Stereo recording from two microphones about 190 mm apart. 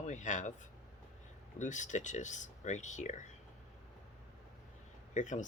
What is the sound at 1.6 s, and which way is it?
Speech, 40° left (ahead or behind).